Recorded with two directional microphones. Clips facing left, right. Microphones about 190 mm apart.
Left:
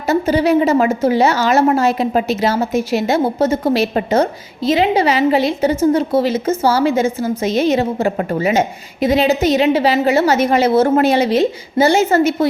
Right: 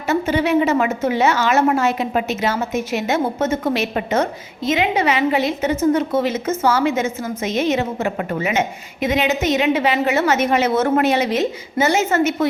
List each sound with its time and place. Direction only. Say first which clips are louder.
0.0 s a woman's voice: left 4 dB; 35° left (ahead or behind)